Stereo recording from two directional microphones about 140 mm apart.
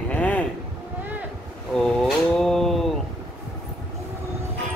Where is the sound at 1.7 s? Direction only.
5° left (ahead or behind).